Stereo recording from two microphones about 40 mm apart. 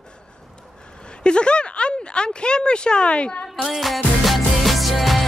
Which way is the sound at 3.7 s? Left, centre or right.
Centre.